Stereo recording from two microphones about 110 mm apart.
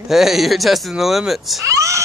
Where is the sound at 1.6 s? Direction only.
30° right (ahead or behind).